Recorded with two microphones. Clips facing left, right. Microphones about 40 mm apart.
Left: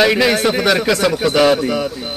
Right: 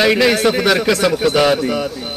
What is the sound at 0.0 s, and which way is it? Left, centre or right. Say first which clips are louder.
A man's voice: even; centre.